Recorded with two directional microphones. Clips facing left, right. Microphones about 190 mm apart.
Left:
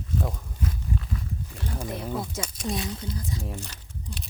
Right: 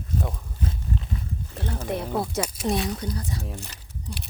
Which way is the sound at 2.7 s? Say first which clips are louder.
Right 3 dB; 70° right (ahead or behind).